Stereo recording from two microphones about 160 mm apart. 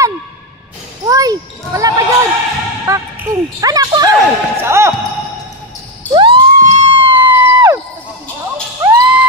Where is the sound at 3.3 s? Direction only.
20° right (ahead or behind).